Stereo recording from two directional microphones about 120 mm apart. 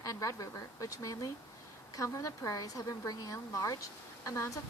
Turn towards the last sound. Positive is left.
turn(degrees=25)  # may be behind; listen again after turning